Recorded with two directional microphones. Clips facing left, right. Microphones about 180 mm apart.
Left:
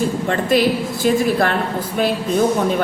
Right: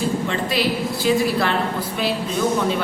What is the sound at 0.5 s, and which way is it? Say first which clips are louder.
A woman's voice: left 8 dB; 50° left (ahead or behind).